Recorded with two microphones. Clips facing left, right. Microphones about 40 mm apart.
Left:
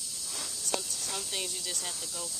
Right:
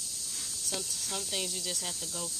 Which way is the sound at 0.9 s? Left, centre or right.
Centre.